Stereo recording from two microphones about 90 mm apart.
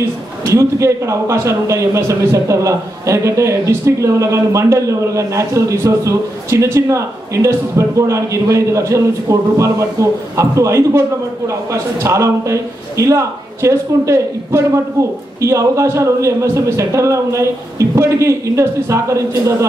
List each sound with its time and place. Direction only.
0.5 s a man's voice: 35° right (ahead or behind)